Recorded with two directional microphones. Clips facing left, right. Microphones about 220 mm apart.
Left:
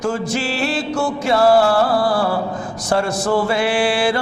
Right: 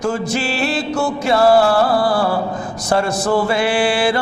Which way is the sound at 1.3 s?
35° right (ahead or behind).